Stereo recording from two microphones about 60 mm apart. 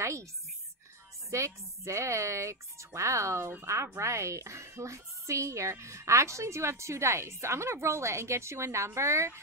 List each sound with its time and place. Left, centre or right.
0.0 s speech: right
1.3 s a woman's voice: right